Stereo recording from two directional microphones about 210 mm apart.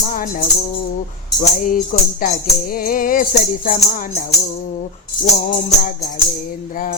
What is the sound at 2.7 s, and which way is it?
Music, 45° left (ahead or behind).